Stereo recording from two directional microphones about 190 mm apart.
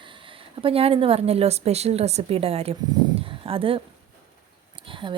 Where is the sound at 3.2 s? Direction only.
30° right (ahead or behind).